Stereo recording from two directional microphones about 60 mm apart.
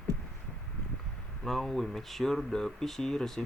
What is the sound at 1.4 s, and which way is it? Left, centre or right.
Speech, centre.